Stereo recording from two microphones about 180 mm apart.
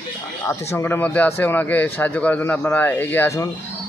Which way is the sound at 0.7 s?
10° left (ahead or behind).